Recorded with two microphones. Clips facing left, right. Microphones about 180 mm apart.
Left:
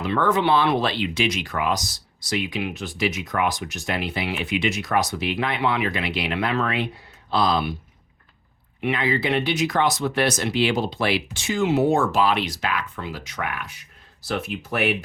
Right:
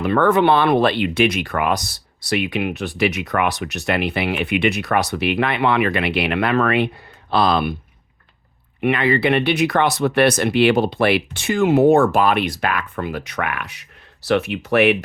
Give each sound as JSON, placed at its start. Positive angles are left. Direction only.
{"t": 0.0, "sound": "speech", "side_deg": -60}
{"t": 8.8, "sound": "speech", "side_deg": -65}